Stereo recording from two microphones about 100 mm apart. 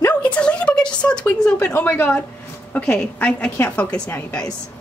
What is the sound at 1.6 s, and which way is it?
A woman's voice, 15° left (ahead or behind).